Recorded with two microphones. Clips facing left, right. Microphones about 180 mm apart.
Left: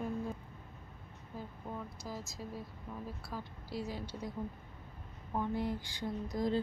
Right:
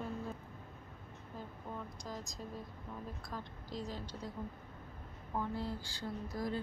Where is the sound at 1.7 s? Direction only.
10° left (ahead or behind).